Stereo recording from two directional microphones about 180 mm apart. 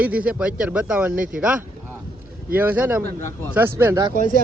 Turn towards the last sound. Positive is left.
turn(degrees=-45)  # may be behind; listen again after turning